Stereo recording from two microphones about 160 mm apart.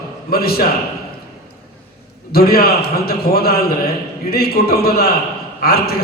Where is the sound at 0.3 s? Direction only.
70° left (ahead or behind).